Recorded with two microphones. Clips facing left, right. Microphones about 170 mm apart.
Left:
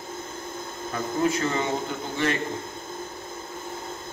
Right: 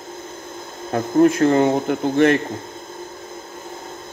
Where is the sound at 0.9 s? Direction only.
55° right (ahead or behind).